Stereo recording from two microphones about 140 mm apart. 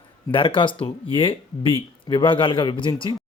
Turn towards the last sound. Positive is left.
turn(degrees=35)  # may be behind; listen again after turning